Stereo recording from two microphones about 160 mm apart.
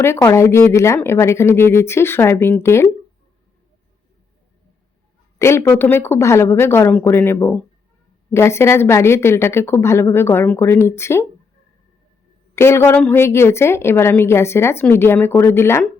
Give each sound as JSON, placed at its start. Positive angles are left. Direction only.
{"t": 0.0, "sound": "a woman's voice", "side_deg": 15}
{"t": 5.4, "sound": "a woman's voice", "side_deg": 15}
{"t": 12.5, "sound": "a woman's voice", "side_deg": 15}